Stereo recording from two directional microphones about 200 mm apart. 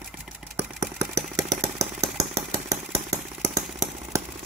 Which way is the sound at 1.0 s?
15° right (ahead or behind).